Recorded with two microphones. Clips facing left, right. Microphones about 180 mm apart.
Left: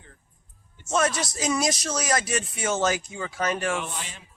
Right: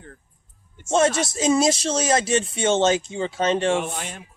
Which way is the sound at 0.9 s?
25° right (ahead or behind).